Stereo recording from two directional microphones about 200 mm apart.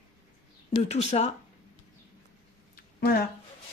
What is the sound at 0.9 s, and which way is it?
Speech, 35° left (ahead or behind).